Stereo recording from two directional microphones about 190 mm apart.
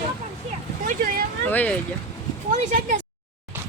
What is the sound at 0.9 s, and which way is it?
Vehicle, 50° right (ahead or behind).